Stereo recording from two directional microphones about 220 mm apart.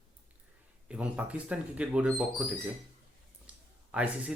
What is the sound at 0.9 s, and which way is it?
Speech, 5° right (ahead or behind).